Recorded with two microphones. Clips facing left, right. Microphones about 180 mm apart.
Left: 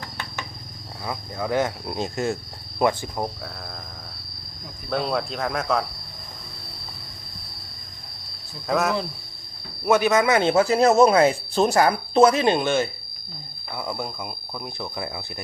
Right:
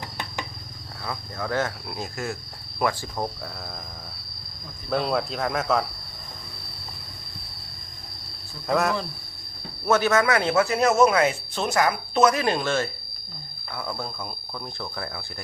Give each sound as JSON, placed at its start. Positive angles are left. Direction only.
{"t": 1.0, "sound": "speech", "side_deg": 15}
{"t": 1.9, "sound": "speech", "side_deg": 25}
{"t": 4.9, "sound": "speech", "side_deg": 0}
{"t": 8.6, "sound": "speech", "side_deg": 0}
{"t": 9.8, "sound": "speech", "side_deg": 15}